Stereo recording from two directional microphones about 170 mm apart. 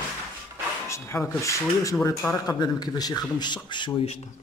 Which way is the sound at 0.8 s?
15° left (ahead or behind).